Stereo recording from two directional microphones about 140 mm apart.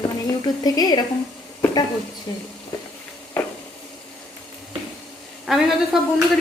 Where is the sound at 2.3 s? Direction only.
30° left (ahead or behind).